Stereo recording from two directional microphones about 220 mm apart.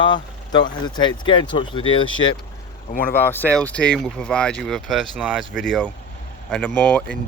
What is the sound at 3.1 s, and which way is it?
Speech, 10° left (ahead or behind).